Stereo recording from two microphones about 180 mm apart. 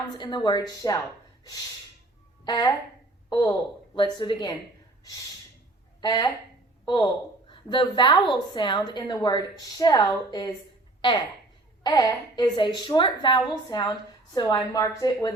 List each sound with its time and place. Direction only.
0.0 s a woman's voice: 25° left (ahead or behind)
2.4 s a woman's voice: 20° left (ahead or behind)
6.0 s a woman's voice: 20° left (ahead or behind)
11.8 s a woman's voice: 20° left (ahead or behind)